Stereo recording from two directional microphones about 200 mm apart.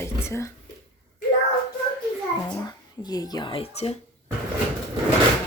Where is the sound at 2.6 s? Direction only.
20° left (ahead or behind).